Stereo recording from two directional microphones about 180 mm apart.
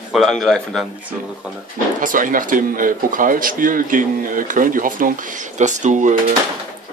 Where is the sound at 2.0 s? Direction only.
50° right (ahead or behind).